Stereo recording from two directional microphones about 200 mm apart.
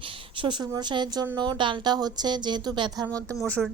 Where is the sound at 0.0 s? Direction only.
25° right (ahead or behind).